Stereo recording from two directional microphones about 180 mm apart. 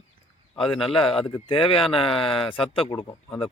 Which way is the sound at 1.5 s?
30° left (ahead or behind).